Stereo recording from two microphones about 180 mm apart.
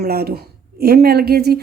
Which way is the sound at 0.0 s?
60° right (ahead or behind).